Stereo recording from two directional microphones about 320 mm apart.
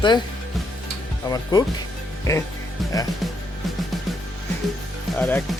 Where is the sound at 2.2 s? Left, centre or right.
Centre.